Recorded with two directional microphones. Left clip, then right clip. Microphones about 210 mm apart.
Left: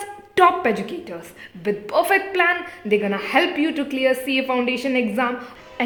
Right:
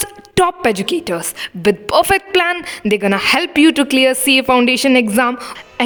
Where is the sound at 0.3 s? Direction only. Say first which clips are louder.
Right 2 dB; 50° right (ahead or behind).